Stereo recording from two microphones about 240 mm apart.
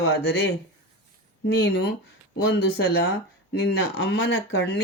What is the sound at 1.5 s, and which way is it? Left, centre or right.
Speech, left.